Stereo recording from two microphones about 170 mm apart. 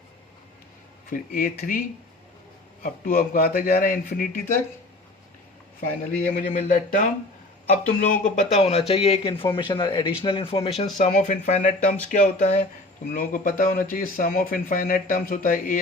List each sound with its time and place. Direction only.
1.1 s speech: 55° left (ahead or behind)
2.8 s speech: 55° left (ahead or behind)
6.1 s speech: 50° left (ahead or behind)
13.1 s speech: 50° left (ahead or behind)